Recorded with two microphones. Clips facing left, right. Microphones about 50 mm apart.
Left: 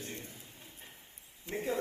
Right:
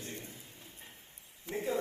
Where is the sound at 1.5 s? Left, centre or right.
Left.